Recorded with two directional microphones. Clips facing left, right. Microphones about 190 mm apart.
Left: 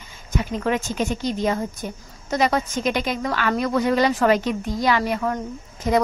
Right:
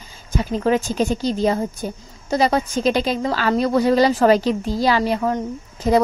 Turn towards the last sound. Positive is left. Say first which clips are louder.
# right 3 dB
turn(degrees=-30)  # may be behind; listen again after turning